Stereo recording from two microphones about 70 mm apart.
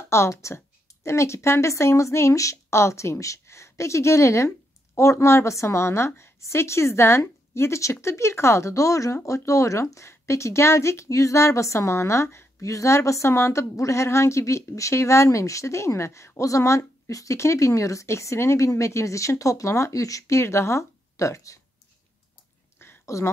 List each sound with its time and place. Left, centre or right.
0.1 s speech: left
23.0 s speech: left